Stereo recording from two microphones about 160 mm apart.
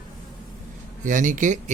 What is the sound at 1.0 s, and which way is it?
Speech, 55° right (ahead or behind).